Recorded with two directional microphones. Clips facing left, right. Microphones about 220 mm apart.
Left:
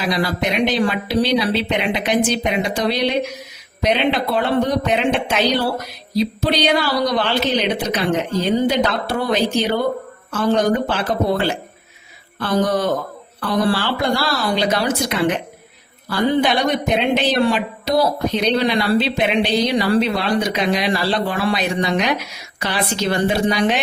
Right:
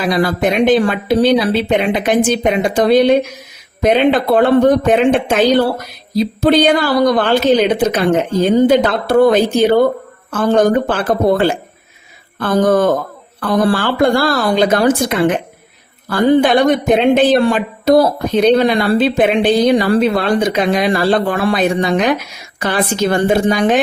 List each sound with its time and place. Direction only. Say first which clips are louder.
0.0 s speech: right 6 dB; 50° right (ahead or behind)